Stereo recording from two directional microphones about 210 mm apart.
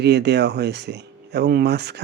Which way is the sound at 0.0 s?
55° right (ahead or behind).